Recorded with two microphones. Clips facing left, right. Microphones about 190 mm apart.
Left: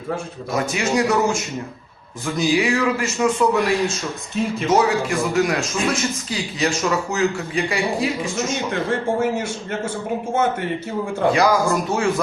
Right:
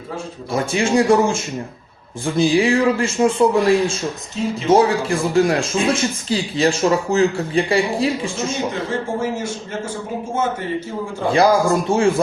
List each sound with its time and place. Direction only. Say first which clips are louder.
0.5 s a man's voice: right 3 dB; 30° right (ahead or behind)
4.4 s speech: even; 55° left (ahead or behind)
4.7 s speech: right 4 dB; 30° right (ahead or behind)
11.3 s a man's voice: right 3 dB; 30° right (ahead or behind)